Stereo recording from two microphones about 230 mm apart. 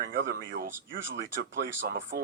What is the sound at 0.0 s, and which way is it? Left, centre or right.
Speech, right.